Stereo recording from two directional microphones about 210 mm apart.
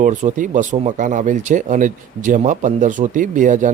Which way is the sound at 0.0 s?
35° right (ahead or behind).